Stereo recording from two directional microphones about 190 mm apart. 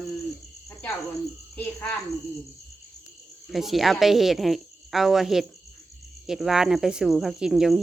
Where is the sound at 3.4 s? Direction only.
Centre (ahead or behind).